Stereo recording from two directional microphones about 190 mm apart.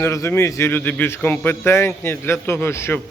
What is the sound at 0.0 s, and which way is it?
A man's voice, 15° left (ahead or behind).